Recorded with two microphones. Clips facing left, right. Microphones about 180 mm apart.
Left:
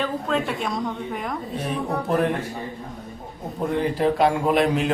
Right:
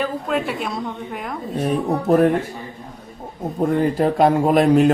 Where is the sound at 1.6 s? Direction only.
45° right (ahead or behind).